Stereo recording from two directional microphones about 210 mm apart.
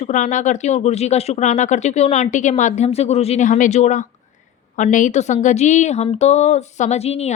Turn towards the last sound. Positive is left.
turn(degrees=30)  # may be behind; listen again after turning